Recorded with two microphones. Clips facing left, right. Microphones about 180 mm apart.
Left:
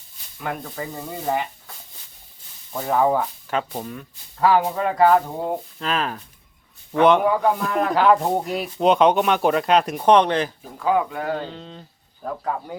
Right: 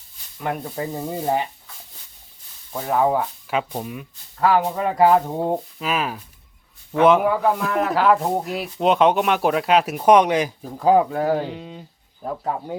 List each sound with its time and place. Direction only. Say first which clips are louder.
0.3 s speech: right 3 dB; 15° right (ahead or behind)
2.7 s speech: even; 5° right (ahead or behind)
4.4 s a man's voice: even; centre (ahead or behind)
4.9 s speech: right 1 dB; 15° right (ahead or behind)
5.8 s a man's voice: right 1 dB; 5° right (ahead or behind)
10.8 s speech: right 5 dB; 35° right (ahead or behind)
11.3 s speech: right 4 dB; 10° right (ahead or behind)